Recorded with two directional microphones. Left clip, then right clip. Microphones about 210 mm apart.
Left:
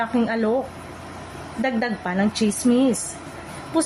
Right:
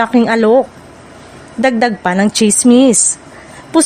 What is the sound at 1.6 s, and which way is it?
A woman's voice, 50° right (ahead or behind).